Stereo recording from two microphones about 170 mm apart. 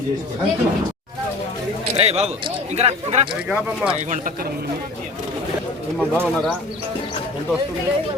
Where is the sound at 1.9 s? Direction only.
40° right (ahead or behind).